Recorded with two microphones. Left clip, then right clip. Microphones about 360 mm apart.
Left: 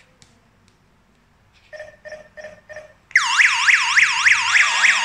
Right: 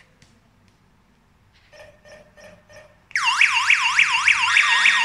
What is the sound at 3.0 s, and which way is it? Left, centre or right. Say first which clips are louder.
Car alarm: left 3 dB; centre.